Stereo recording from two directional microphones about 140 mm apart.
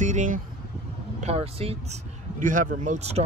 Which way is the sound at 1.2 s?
45° right (ahead or behind).